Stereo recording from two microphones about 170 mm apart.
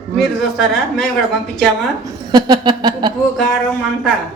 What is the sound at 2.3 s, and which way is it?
Speech, 25° right (ahead or behind).